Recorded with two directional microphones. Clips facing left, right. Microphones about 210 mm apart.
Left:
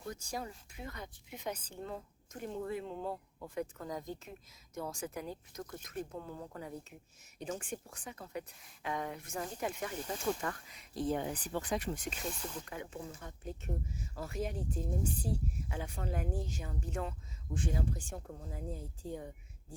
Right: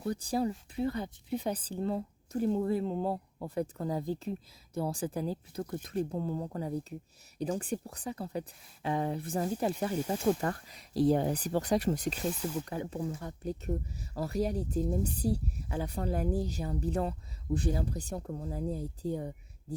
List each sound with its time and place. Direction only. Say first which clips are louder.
0.0 s a woman's voice: right 11 dB; 35° right (ahead or behind)